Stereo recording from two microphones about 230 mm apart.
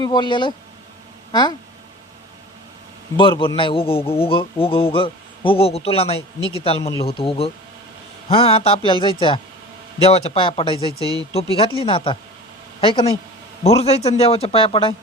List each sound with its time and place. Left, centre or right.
0.0 s a man's voice: centre
3.2 s a man's voice: left